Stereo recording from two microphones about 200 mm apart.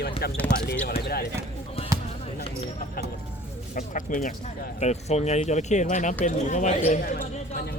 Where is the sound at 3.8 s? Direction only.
40° left (ahead or behind).